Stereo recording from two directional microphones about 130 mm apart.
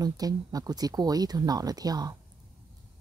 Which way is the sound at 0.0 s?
30° right (ahead or behind).